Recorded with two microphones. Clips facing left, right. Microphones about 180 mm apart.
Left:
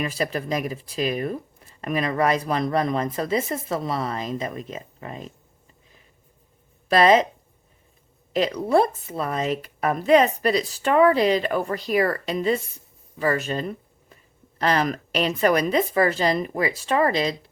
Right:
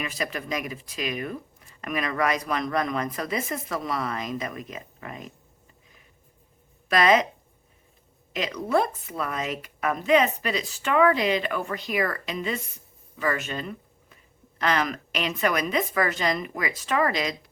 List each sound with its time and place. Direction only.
0.0 s speech: 35° left (ahead or behind)
6.8 s speech: 30° left (ahead or behind)
8.3 s speech: 30° left (ahead or behind)